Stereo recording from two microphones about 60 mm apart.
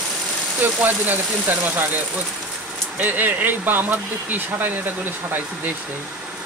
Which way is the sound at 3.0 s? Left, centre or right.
Right.